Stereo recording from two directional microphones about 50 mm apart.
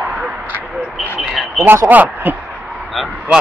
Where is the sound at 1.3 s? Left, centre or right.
Centre.